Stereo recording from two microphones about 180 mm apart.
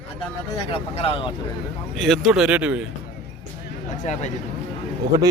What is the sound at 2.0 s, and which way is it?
Speech, centre (ahead or behind).